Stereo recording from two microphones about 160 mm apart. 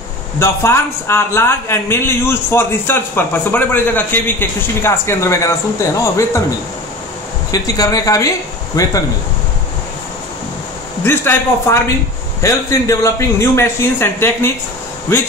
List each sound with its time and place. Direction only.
0.4 s a man's voice: 15° left (ahead or behind)
7.5 s speech: 20° left (ahead or behind)
11.1 s a man's voice: 15° left (ahead or behind)